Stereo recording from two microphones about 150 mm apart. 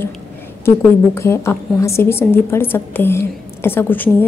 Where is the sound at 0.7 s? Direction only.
20° left (ahead or behind).